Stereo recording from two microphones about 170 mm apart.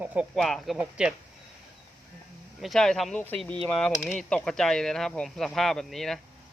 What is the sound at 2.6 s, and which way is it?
Speech, centre (ahead or behind).